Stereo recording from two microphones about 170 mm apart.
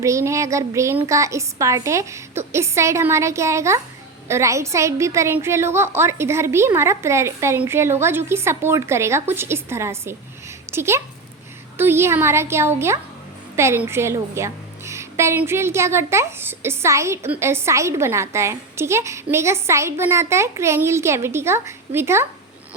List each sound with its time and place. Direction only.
0.0 s a woman's voice: 15° right (ahead or behind)